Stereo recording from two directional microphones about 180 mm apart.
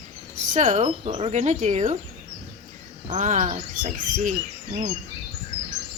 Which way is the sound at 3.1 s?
40° right (ahead or behind).